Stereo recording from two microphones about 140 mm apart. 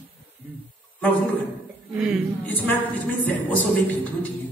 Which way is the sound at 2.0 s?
5° right (ahead or behind).